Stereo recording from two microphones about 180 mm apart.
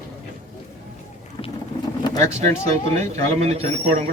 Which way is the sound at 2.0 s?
20° left (ahead or behind).